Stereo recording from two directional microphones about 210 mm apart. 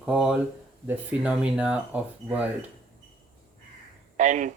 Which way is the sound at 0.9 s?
5° right (ahead or behind).